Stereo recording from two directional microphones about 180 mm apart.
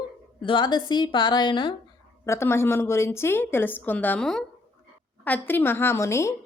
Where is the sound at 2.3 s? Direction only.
15° left (ahead or behind).